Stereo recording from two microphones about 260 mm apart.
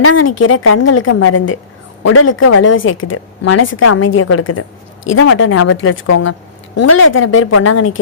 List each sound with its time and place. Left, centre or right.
0.0 s a woman's voice: left